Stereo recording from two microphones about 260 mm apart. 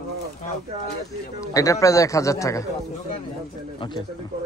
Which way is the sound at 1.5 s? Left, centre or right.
Centre.